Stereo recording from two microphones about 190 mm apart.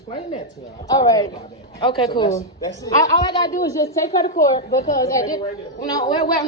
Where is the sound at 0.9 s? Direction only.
20° left (ahead or behind).